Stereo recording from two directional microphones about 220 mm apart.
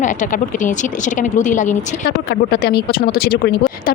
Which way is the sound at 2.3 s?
45° left (ahead or behind).